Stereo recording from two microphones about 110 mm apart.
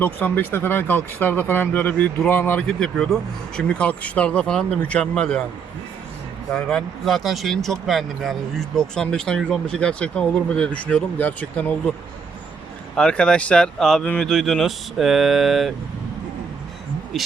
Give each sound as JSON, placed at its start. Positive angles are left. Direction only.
{"t": 0.0, "sound": "speech", "side_deg": 15}
{"t": 2.6, "sound": "speech", "side_deg": 5}
{"t": 6.5, "sound": "speech", "side_deg": 5}
{"t": 13.0, "sound": "speech", "side_deg": 10}
{"t": 17.1, "sound": "speech", "side_deg": 0}